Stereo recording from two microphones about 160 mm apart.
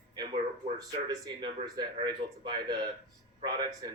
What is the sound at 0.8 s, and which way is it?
Speech, 25° right (ahead or behind).